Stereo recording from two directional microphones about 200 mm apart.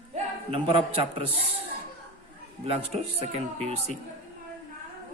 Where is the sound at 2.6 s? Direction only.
30° right (ahead or behind).